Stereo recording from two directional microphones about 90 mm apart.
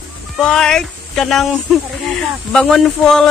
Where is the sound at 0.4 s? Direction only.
5° left (ahead or behind).